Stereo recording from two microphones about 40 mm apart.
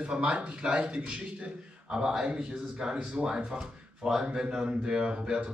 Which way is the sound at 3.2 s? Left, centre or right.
Centre.